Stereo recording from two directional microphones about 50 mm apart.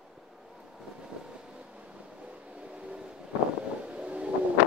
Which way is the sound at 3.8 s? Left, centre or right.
Right.